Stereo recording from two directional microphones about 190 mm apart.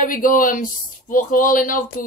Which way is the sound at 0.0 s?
45° left (ahead or behind).